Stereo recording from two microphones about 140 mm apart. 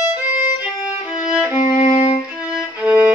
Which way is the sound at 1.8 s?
35° left (ahead or behind).